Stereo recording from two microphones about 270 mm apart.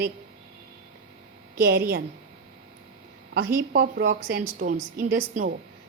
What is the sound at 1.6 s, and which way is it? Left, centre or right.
Speech, right.